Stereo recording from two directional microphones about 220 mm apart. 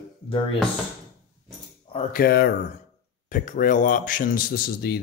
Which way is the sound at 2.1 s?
45° left (ahead or behind).